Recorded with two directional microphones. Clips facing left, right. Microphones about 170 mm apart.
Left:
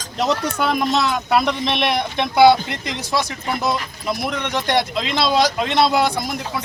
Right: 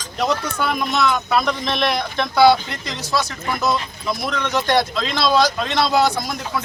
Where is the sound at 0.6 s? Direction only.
30° left (ahead or behind).